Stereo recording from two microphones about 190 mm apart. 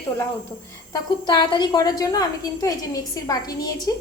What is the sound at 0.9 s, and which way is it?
A woman's voice, 20° left (ahead or behind).